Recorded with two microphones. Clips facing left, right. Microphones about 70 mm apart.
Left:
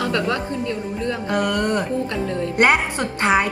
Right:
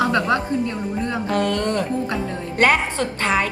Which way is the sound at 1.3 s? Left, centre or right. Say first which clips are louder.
Left 1 dB; centre.